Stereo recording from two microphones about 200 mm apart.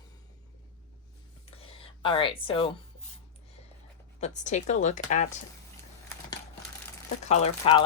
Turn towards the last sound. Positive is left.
turn(degrees=30)  # may be behind; listen again after turning